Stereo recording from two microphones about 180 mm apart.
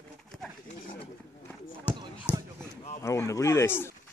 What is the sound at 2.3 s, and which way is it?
Basketball bounce, 10° left (ahead or behind).